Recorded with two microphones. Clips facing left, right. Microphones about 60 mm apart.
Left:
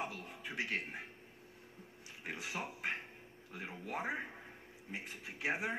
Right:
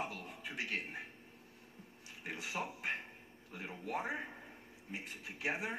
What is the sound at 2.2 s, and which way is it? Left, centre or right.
Speech, left.